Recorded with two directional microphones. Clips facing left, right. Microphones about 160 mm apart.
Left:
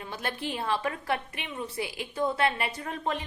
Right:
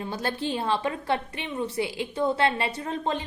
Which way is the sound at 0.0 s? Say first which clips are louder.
Right 5 dB; 30° right (ahead or behind).